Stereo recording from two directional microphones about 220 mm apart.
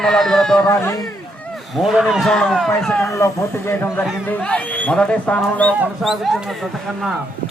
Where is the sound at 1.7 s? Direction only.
Centre (ahead or behind).